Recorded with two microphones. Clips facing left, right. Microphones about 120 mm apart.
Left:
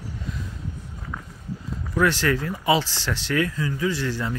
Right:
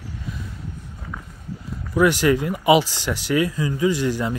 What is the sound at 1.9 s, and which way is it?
Speech, 15° right (ahead or behind).